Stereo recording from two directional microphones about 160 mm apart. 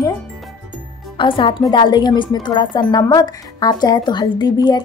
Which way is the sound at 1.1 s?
30° left (ahead or behind).